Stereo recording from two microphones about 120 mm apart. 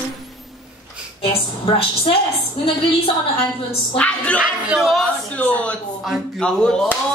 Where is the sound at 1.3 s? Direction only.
50° left (ahead or behind).